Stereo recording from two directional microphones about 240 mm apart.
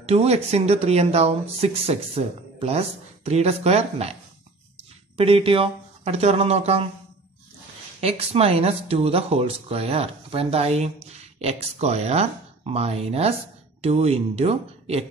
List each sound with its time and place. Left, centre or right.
0.0 s speech: right
5.1 s speech: right
8.0 s speech: right